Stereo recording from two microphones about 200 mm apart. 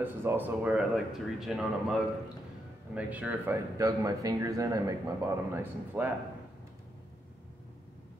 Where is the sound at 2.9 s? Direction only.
5° right (ahead or behind).